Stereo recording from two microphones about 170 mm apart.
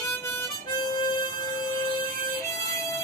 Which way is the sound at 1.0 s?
25° left (ahead or behind).